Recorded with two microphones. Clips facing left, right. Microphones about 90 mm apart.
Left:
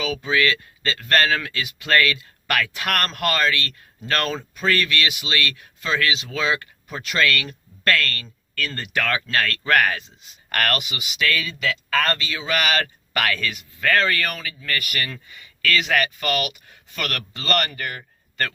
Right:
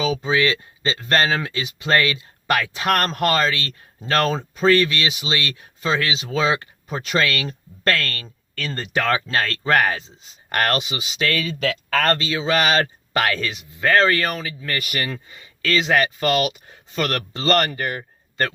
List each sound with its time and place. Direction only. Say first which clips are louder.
0.0 s speech: right 2 dB; 25° right (ahead or behind)
11.3 s speech: right 2 dB; 45° right (ahead or behind)
12.2 s speech: right 4 dB; 25° right (ahead or behind)